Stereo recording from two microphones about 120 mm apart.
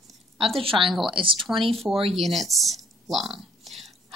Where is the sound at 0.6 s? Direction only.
45° right (ahead or behind).